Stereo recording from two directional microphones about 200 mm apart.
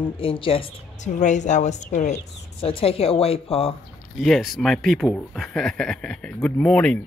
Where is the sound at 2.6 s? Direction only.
30° left (ahead or behind).